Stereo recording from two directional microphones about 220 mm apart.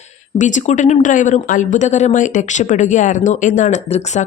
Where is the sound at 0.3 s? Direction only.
35° left (ahead or behind).